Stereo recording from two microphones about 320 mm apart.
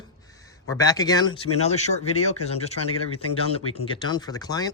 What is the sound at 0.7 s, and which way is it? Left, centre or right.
Speech, centre.